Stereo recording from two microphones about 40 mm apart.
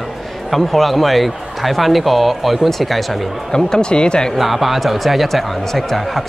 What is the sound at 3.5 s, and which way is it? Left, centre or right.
Speech, centre.